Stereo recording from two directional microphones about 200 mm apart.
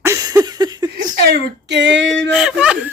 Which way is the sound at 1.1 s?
55° right (ahead or behind).